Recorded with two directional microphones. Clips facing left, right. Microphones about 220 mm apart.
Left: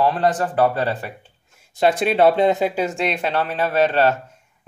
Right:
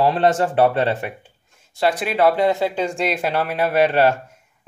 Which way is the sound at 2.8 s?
Centre (ahead or behind).